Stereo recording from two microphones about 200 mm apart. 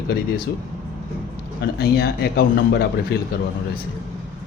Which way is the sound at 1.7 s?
50° left (ahead or behind).